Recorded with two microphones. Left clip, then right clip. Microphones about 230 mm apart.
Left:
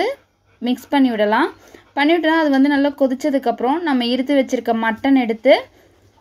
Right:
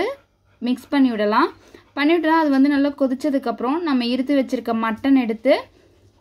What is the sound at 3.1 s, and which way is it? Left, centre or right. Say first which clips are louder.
A woman's voice: left 4 dB; left.